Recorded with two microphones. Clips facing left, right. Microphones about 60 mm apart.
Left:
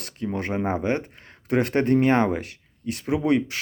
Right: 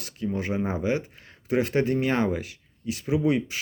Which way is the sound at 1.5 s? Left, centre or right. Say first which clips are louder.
Left 3 dB; left.